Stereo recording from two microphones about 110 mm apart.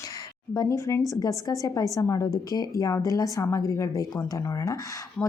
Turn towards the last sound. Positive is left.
turn(degrees=0)  # may be behind; listen again after turning